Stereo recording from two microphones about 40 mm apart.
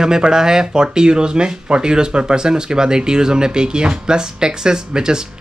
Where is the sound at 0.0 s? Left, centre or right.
Centre.